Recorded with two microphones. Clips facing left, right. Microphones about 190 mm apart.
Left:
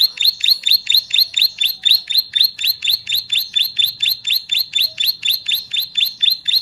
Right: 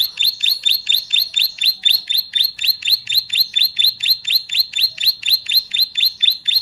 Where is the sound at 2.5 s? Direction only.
Centre (ahead or behind).